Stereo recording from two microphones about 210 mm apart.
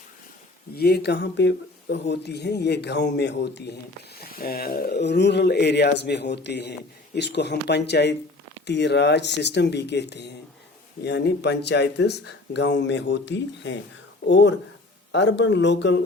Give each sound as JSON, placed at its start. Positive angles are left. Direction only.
{"t": 0.8, "sound": "speech", "side_deg": 50}